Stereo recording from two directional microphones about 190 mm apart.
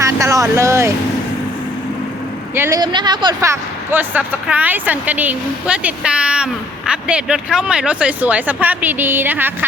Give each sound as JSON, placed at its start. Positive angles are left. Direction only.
{"t": 0.0, "sound": "vehicle", "side_deg": -15}
{"t": 2.6, "sound": "speech", "side_deg": -15}